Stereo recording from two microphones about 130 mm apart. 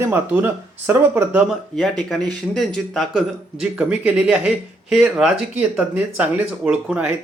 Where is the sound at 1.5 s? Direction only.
Centre (ahead or behind).